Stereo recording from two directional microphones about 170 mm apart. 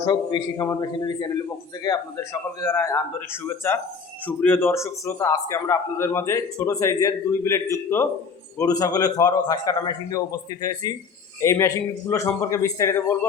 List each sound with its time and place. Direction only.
0.0 s a man's voice: 25° left (ahead or behind)
2.6 s a man's voice: 15° left (ahead or behind)